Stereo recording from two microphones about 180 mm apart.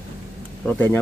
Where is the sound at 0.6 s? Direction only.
10° left (ahead or behind).